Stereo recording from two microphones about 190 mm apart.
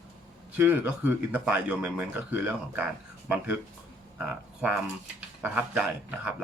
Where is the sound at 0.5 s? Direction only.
10° right (ahead or behind).